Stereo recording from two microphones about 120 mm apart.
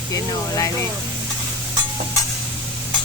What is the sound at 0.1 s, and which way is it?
Speech, 30° left (ahead or behind).